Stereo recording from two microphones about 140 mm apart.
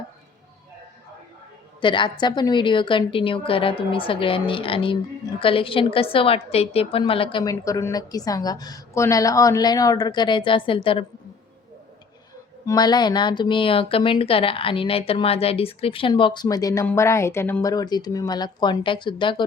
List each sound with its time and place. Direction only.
1.8 s speech: 35° left (ahead or behind)
7.4 s a woman's voice: 25° left (ahead or behind)
12.6 s a woman's voice: 30° left (ahead or behind)
17.6 s speech: 25° left (ahead or behind)